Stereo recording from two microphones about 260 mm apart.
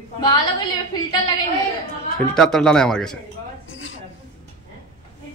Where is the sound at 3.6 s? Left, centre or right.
Left.